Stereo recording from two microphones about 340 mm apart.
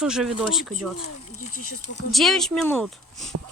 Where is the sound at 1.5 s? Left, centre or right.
Left.